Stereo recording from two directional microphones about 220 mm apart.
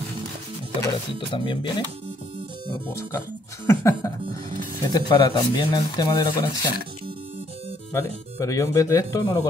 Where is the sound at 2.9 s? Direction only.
15° left (ahead or behind).